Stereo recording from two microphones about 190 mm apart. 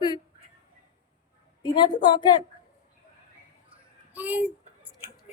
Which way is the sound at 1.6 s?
25° left (ahead or behind).